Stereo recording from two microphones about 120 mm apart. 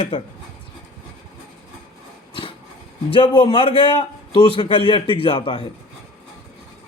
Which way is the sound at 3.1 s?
45° left (ahead or behind).